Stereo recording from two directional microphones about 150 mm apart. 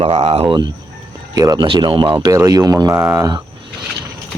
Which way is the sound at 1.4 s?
30° right (ahead or behind).